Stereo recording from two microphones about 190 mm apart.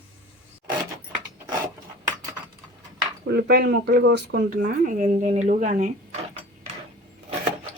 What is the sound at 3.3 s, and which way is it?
Speech, 55° right (ahead or behind).